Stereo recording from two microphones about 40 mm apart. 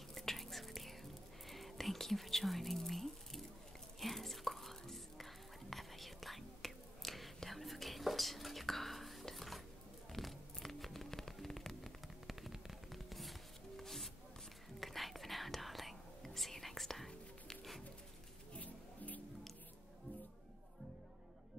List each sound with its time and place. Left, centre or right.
0.1 s whispering: centre
10.1 s music: centre
12.3 s music: centre
14.8 s whispering: centre
18.5 s music: left